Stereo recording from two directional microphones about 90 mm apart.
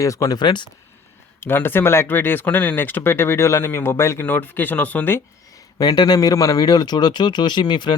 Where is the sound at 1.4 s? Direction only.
25° left (ahead or behind).